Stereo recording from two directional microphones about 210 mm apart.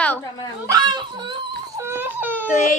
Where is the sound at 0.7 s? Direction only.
20° right (ahead or behind).